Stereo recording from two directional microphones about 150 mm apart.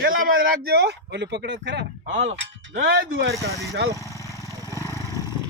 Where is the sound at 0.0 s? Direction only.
85° right.